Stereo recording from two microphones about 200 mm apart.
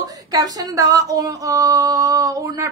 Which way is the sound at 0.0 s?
20° right (ahead or behind).